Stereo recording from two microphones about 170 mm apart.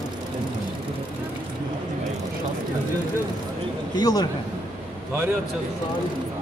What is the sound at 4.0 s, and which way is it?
Speech, 25° left (ahead or behind).